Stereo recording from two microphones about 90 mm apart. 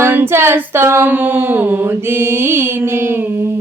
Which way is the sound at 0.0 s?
25° right (ahead or behind).